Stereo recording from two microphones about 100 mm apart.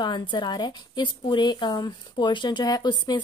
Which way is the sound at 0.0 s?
50° left (ahead or behind).